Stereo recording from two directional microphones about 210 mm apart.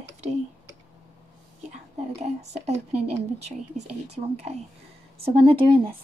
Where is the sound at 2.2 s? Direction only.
30° right (ahead or behind).